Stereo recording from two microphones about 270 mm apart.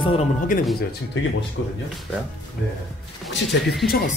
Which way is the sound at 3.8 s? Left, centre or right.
Left.